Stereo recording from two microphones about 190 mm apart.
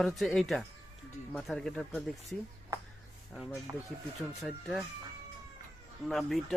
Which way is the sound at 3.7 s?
20° right (ahead or behind).